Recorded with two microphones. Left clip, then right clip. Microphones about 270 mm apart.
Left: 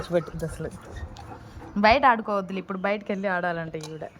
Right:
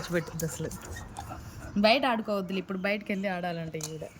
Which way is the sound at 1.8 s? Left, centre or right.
Centre.